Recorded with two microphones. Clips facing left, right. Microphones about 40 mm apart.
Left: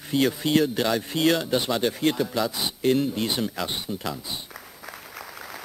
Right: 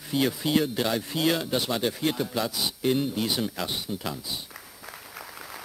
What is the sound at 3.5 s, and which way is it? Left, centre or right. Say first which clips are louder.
Speech: left 2 dB; centre.